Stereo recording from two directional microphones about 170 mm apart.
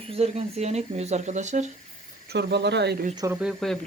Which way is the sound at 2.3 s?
80° right.